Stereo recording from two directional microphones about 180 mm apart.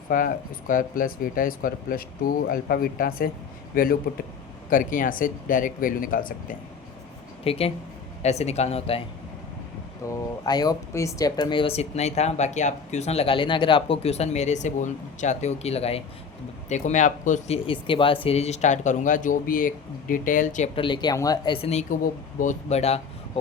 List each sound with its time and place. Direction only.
0.1 s speech: 50° left (ahead or behind)
7.4 s speech: 35° left (ahead or behind)
10.1 s speech: 20° left (ahead or behind); by 17.6 s 45° left (ahead or behind)
17.7 s speech: 30° left (ahead or behind); by 20.7 s 45° left (ahead or behind)
20.7 s speech: 25° left (ahead or behind)